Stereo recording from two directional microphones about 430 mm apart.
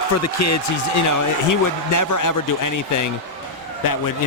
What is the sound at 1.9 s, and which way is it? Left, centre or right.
Speech, left.